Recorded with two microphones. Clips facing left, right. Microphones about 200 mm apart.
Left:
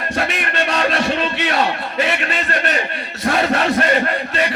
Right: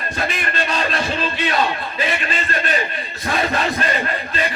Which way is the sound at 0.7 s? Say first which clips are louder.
Left 5 dB; 75° left (ahead or behind).